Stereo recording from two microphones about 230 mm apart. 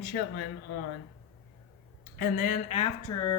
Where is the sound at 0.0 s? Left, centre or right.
Left.